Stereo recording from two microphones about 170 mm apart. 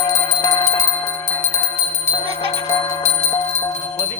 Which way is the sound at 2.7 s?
20° left (ahead or behind).